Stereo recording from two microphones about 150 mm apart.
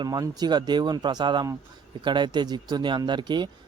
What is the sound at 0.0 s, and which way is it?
Speech, 25° right (ahead or behind).